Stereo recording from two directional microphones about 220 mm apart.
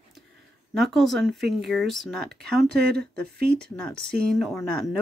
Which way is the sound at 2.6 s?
45° right (ahead or behind).